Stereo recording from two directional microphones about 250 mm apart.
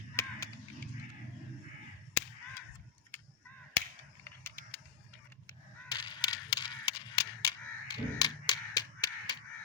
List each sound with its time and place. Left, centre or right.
0.2 s crow: centre
4.2 s a sound: centre
5.9 s camera: centre